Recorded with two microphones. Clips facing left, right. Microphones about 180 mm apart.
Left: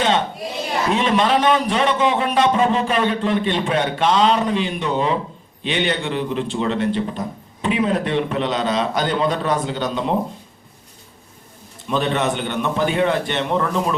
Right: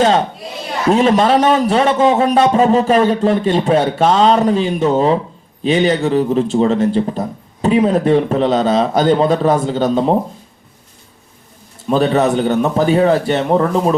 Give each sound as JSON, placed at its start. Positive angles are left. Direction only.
{"t": 0.9, "sound": "a man's voice", "side_deg": -40}
{"t": 11.9, "sound": "a man's voice", "side_deg": -40}